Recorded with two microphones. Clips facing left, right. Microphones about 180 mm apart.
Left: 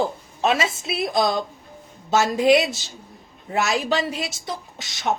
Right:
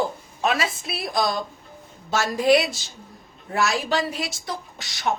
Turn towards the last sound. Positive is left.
turn(degrees=20)  # may be behind; listen again after turning